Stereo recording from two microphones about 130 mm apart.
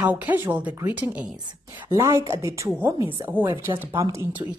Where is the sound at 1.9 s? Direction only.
25° right (ahead or behind).